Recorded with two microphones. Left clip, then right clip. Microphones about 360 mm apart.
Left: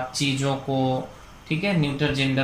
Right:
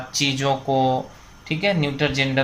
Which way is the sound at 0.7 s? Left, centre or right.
Right.